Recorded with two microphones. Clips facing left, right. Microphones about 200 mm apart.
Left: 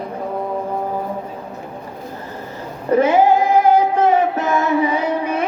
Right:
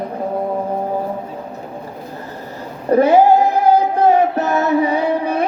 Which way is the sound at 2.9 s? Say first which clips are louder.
Right 2 dB; 40° right (ahead or behind).